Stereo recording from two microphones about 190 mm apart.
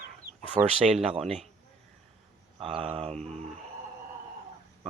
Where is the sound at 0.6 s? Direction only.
15° right (ahead or behind).